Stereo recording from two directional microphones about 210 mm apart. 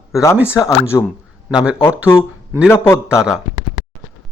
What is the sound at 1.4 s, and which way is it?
Speech, 5° right (ahead or behind).